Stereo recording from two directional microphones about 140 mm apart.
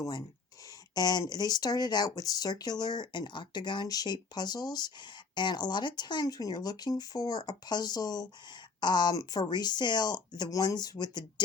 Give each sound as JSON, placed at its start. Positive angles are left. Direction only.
{"t": 0.0, "sound": "speech", "side_deg": 30}